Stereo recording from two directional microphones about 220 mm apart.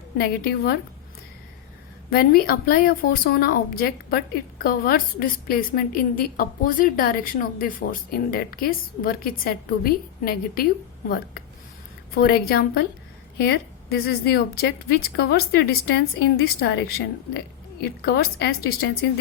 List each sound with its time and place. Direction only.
0.2 s a woman's voice: 45° left (ahead or behind)
2.0 s a woman's voice: 45° left (ahead or behind)
12.1 s a woman's voice: 45° left (ahead or behind)